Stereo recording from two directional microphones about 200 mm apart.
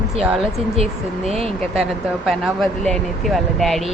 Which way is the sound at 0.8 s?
30° right (ahead or behind).